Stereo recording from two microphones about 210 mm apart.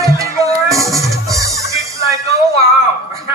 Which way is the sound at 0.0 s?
15° right (ahead or behind).